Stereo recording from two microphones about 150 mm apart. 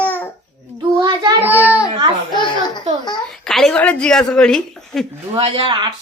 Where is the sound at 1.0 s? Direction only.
30° right (ahead or behind).